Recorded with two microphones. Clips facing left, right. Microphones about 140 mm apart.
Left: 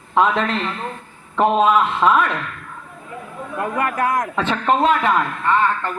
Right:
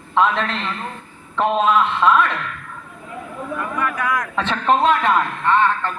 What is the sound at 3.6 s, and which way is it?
Speech, 60° left (ahead or behind).